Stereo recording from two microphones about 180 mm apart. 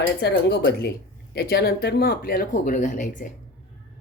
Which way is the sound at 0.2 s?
65° left (ahead or behind).